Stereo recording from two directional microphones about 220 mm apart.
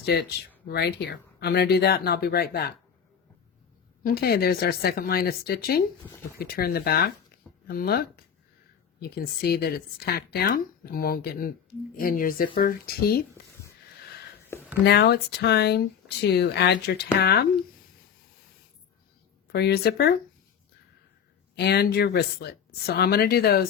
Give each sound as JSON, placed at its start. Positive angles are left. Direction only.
{"t": 0.0, "sound": "speech", "side_deg": 50}
{"t": 4.0, "sound": "speech", "side_deg": 45}
{"t": 14.5, "sound": "a sound", "side_deg": 10}
{"t": 14.8, "sound": "speech", "side_deg": 50}
{"t": 19.5, "sound": "speech", "side_deg": 50}
{"t": 21.5, "sound": "speech", "side_deg": 45}